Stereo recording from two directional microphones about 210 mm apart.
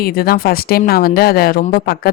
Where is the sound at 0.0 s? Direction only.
45° left (ahead or behind).